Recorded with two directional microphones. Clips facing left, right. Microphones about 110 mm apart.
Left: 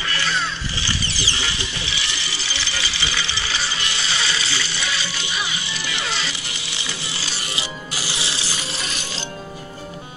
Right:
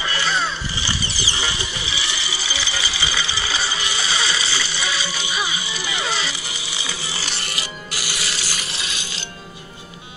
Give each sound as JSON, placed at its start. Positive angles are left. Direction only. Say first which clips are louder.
{"t": 0.0, "sound": "a sound", "louder": "right 2 dB", "side_deg": -15}
{"t": 8.1, "sound": "music", "louder": "even", "side_deg": 20}
{"t": 8.7, "sound": "music", "louder": "left 2 dB", "side_deg": 40}